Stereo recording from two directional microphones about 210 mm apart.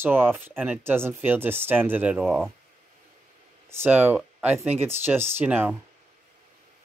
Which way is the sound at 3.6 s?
10° right (ahead or behind).